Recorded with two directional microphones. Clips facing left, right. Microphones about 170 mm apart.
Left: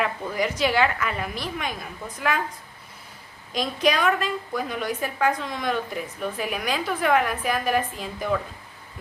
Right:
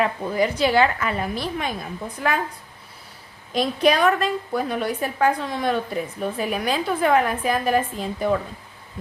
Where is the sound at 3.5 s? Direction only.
30° right (ahead or behind).